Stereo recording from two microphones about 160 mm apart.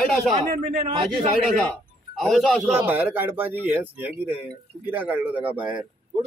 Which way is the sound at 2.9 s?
10° right (ahead or behind).